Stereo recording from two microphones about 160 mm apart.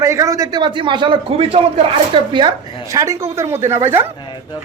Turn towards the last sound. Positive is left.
turn(degrees=-15)  # may be behind; listen again after turning